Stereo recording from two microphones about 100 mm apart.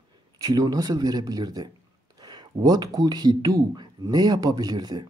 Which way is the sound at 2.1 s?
45° right (ahead or behind).